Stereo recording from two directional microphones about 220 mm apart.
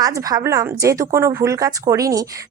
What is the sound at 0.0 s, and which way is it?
A woman's voice, 15° right (ahead or behind).